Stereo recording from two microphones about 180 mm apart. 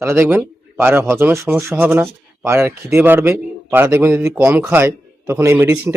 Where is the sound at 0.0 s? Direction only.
15° right (ahead or behind).